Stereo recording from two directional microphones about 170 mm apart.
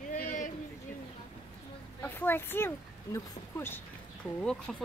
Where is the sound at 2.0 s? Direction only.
10° left (ahead or behind).